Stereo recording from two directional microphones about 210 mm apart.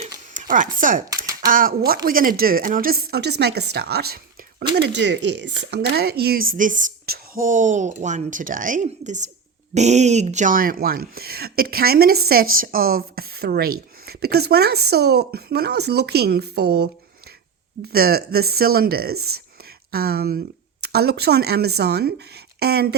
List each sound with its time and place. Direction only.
0.3 s speech: 40° right (ahead or behind)
1.1 s a sound: 15° right (ahead or behind)
1.5 s speech: 40° right (ahead or behind)